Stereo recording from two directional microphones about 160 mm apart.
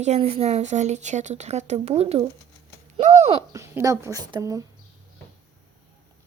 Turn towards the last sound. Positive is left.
turn(degrees=-20)  # may be behind; listen again after turning